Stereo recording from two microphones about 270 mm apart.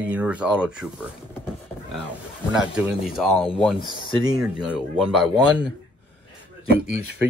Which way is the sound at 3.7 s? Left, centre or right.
Centre.